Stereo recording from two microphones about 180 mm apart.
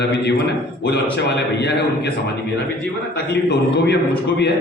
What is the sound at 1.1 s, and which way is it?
Speech, 70° left (ahead or behind).